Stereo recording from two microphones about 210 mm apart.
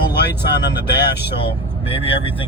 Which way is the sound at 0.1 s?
50° left (ahead or behind).